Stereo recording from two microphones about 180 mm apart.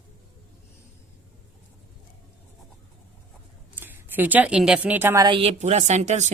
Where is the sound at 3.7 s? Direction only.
10° right (ahead or behind).